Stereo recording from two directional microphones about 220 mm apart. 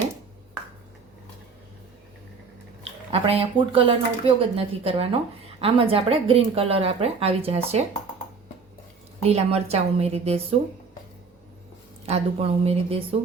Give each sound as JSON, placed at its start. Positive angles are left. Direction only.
{"t": 3.1, "sound": "a woman's voice", "side_deg": -25}
{"t": 9.2, "sound": "a woman's voice", "side_deg": -30}
{"t": 12.0, "sound": "a woman's voice", "side_deg": -25}